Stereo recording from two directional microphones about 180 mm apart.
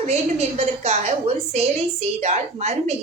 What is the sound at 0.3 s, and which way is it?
A woman's voice, 35° right (ahead or behind).